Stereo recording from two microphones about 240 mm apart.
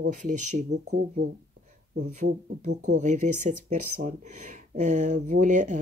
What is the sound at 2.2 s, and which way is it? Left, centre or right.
Speech, right.